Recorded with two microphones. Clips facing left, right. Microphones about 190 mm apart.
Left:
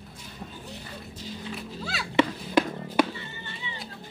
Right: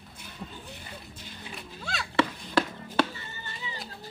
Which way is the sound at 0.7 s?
55° right (ahead or behind).